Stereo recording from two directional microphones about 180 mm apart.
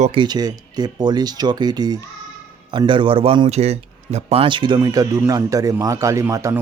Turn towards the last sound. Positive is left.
turn(degrees=-20)  # may be behind; listen again after turning